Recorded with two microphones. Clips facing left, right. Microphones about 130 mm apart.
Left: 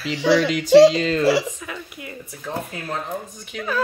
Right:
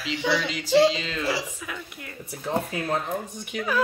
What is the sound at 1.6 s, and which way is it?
Speech, 5° left (ahead or behind).